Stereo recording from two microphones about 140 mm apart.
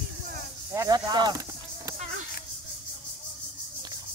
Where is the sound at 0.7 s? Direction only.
25° right (ahead or behind).